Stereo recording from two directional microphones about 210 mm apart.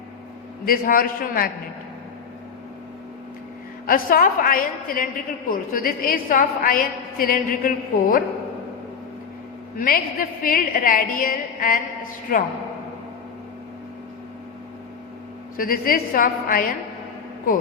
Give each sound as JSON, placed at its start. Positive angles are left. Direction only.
{"t": 0.6, "sound": "a woman's voice", "side_deg": 45}
{"t": 3.8, "sound": "a woman's voice", "side_deg": 45}
{"t": 9.7, "sound": "a woman's voice", "side_deg": 45}
{"t": 15.5, "sound": "a woman's voice", "side_deg": 45}